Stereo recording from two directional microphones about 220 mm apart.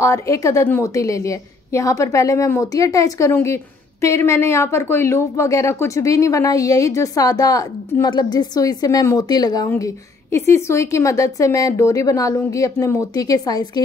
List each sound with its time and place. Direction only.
0.0 s a woman's voice: 15° left (ahead or behind)